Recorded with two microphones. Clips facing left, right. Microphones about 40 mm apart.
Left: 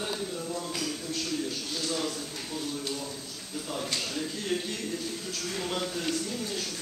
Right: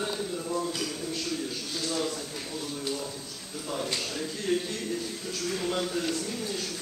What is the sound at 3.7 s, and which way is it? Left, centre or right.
A man's voice, centre.